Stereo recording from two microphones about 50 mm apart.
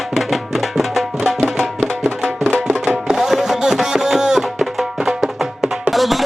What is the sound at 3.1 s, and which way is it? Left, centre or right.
Music, centre.